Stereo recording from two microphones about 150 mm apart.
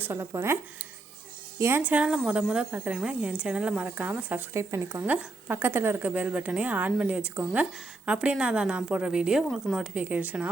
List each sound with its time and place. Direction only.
0.0 s speech: 15° right (ahead or behind)